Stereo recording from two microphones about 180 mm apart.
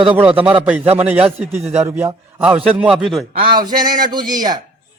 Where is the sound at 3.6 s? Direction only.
25° right (ahead or behind).